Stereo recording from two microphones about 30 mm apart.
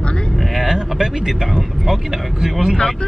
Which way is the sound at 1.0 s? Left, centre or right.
Centre.